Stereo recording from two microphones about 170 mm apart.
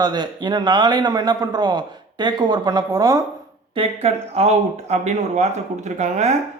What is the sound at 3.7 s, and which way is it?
Speech, 35° right (ahead or behind).